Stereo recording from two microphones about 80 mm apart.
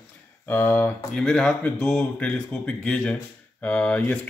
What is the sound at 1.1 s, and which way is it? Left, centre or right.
Speech, centre.